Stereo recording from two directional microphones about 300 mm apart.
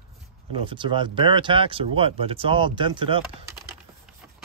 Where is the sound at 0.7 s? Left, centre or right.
Centre.